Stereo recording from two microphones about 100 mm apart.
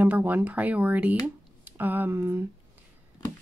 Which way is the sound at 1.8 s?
20° right (ahead or behind).